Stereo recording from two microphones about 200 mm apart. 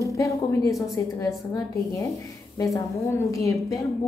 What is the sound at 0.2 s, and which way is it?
A woman's voice, 15° left (ahead or behind).